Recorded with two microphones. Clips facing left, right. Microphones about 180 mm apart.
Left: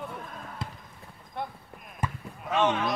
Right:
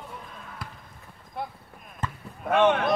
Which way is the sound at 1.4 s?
Centre (ahead or behind).